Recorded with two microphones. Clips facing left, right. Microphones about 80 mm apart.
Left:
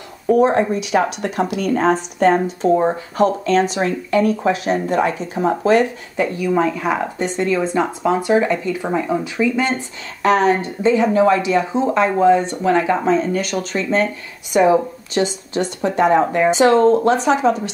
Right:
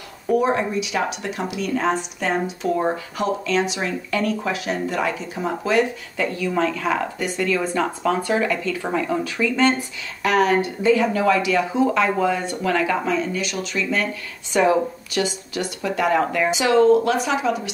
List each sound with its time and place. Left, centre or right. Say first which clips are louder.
0.6 s speech: left 6 dB; left
4.1 s speech: left 7 dB; left
6.1 s speech: left 5 dB; centre
10.2 s speech: left 3 dB; left
14.5 s speech: left 4 dB; left